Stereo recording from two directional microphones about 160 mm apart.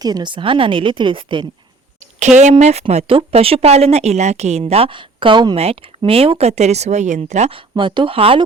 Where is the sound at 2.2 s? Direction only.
50° right (ahead or behind).